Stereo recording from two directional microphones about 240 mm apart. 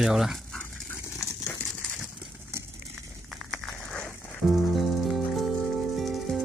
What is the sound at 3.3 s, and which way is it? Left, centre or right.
Music, centre.